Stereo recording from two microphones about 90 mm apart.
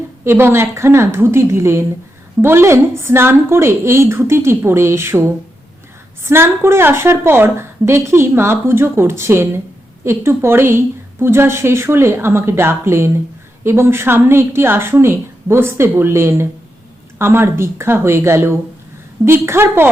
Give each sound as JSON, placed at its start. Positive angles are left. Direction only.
{"t": 0.3, "sound": "a woman's voice", "side_deg": -30}